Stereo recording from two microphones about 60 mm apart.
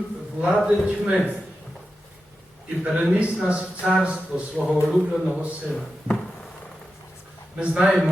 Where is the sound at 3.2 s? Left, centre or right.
Centre.